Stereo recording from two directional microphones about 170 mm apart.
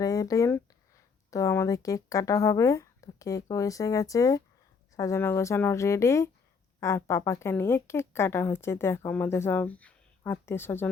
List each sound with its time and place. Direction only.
0.0 s a woman's voice: 20° left (ahead or behind)